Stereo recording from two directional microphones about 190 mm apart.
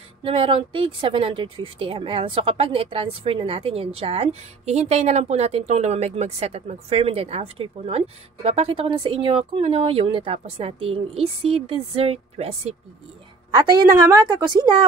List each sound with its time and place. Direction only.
0.2 s a woman's voice: 30° right (ahead or behind)